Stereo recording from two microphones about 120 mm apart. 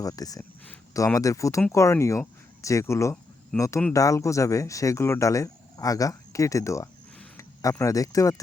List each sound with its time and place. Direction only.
0.0 s speech: 30° left (ahead or behind)
3.5 s speech: 10° left (ahead or behind)
3.9 s speech: 25° left (ahead or behind)